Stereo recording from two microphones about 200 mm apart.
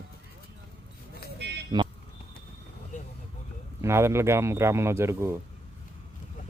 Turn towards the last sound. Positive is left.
turn(degrees=-10)  # may be behind; listen again after turning